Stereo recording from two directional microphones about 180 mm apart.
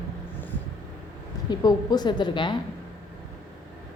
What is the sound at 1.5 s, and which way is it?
A woman's voice, 20° left (ahead or behind).